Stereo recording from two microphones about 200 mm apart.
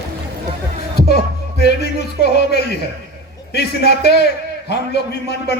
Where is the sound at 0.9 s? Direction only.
55° left (ahead or behind).